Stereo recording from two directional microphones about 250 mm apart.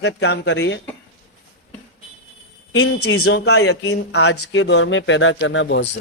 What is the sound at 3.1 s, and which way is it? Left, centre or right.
Speech, left.